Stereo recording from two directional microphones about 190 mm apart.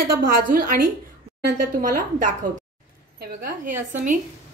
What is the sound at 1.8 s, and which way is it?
A woman's voice, 45° right (ahead or behind).